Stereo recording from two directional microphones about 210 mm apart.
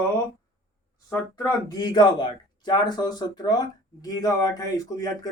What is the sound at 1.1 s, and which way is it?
Speech, 15° left (ahead or behind).